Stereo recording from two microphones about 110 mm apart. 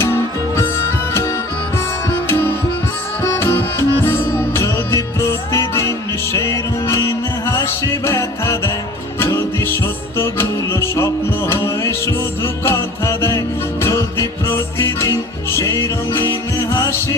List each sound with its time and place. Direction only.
0.0 s music: 25° left (ahead or behind)
2.0 s music: 25° left (ahead or behind)